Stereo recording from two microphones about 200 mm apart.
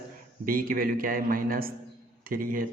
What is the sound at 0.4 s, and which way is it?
Speech, 45° right (ahead or behind).